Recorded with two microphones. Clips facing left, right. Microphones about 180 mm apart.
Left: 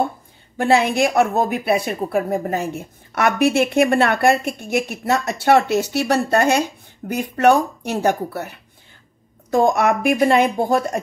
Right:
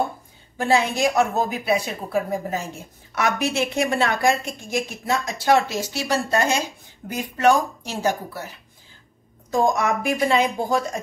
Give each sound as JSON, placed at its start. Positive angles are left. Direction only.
{"t": 0.6, "sound": "a woman's voice", "side_deg": 60}